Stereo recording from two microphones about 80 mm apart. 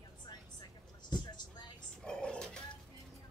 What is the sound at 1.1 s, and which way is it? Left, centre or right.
Vehicle, left.